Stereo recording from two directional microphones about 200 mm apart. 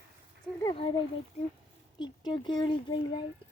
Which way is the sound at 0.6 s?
25° left (ahead or behind).